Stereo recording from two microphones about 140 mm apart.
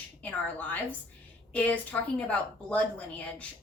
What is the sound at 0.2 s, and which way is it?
A woman's voice, 10° left (ahead or behind).